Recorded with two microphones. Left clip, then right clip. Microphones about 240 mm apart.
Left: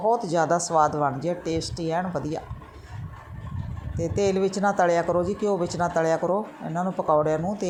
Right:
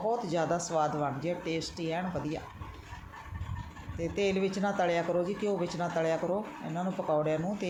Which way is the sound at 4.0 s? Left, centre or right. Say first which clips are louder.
Left 7 dB; left.